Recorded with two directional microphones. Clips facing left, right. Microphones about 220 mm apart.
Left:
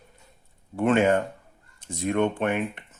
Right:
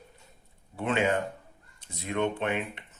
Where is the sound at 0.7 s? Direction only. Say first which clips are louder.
Left 7 dB; 50° left (ahead or behind).